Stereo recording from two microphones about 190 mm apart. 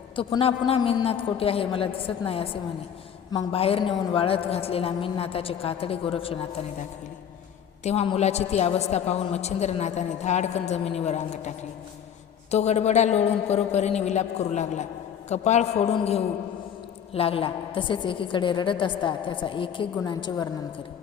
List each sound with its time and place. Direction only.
0.2 s a woman's voice: 25° left (ahead or behind)
7.9 s a woman's voice: 30° left (ahead or behind)